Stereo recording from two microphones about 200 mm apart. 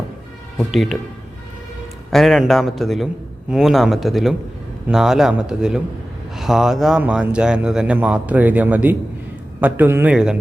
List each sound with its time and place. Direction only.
0.7 s speech: centre (ahead or behind)
2.0 s a man's voice: centre (ahead or behind)